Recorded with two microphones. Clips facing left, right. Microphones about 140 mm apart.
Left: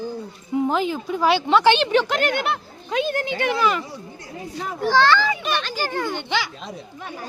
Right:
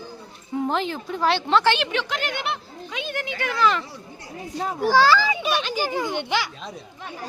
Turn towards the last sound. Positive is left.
turn(degrees=-10)  # may be behind; listen again after turning